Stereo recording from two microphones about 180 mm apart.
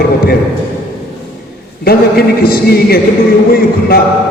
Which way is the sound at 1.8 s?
60° left (ahead or behind).